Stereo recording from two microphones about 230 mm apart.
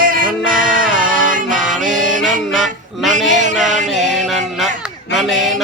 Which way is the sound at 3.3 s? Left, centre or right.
Right.